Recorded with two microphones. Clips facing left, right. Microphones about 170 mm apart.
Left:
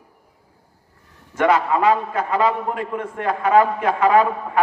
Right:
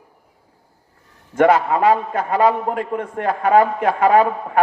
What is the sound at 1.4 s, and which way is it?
A man's voice, 50° right (ahead or behind).